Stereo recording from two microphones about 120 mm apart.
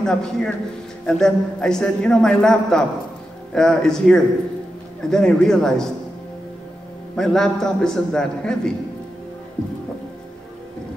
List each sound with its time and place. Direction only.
0.0 s a man's voice: 5° left (ahead or behind)
7.2 s a man's voice: 5° left (ahead or behind)